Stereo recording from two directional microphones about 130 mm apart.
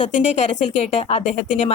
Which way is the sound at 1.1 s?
55° left (ahead or behind).